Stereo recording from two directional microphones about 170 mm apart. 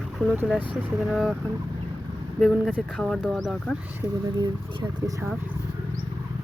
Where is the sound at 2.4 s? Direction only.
5° right (ahead or behind).